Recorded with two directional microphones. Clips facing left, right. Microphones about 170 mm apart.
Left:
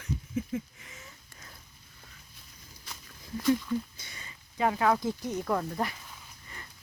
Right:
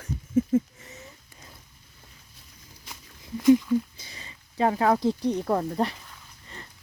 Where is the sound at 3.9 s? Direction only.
30° right (ahead or behind).